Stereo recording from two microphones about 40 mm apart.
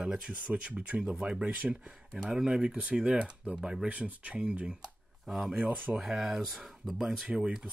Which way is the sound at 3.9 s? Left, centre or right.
Right.